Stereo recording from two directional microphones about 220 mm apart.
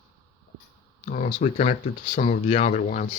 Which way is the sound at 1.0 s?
35° left (ahead or behind).